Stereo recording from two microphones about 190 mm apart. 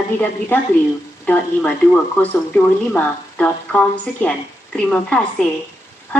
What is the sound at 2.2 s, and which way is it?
A woman's voice, 10° left (ahead or behind).